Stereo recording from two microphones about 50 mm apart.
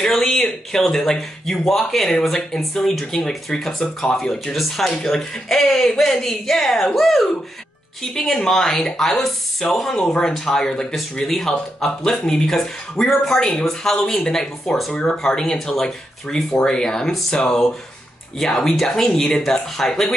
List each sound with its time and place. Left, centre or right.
0.0 s speech: centre
3.8 s speech: left
4.2 s speech: centre
8.4 s speech: centre